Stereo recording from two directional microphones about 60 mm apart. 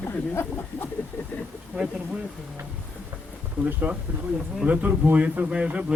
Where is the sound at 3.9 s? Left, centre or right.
Right.